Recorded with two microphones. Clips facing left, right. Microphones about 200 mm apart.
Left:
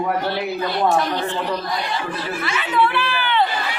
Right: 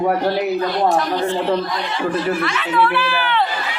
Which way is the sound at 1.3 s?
30° right (ahead or behind).